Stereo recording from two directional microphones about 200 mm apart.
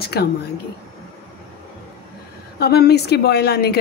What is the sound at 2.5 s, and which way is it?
A woman's voice, 55° left (ahead or behind).